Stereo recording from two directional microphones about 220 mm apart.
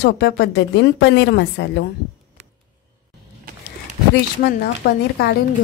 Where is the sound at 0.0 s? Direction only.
50° left (ahead or behind).